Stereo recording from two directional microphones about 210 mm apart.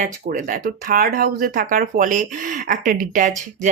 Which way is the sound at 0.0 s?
40° right (ahead or behind).